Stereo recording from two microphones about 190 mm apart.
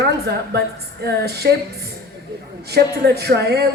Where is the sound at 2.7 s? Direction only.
60° right (ahead or behind).